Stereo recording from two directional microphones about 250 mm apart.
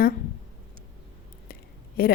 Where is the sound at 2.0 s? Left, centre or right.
Left.